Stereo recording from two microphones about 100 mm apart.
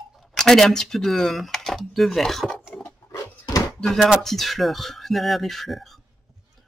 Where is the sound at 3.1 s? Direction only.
35° left (ahead or behind).